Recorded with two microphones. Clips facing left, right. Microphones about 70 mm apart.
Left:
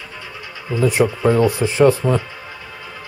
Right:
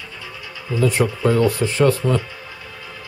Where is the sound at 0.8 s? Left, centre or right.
Centre.